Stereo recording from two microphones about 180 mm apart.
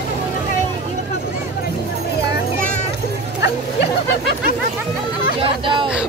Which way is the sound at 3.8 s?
70° left (ahead or behind).